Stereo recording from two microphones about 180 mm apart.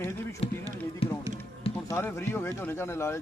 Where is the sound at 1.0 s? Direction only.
30° left (ahead or behind).